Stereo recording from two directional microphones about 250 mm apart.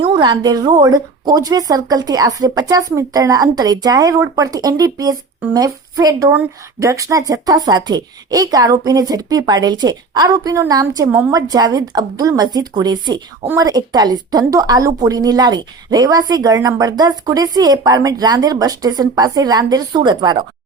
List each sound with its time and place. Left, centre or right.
0.0 s a woman's voice: centre